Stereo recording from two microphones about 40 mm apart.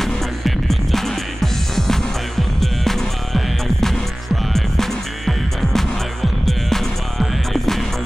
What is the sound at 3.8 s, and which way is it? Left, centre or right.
Music, centre.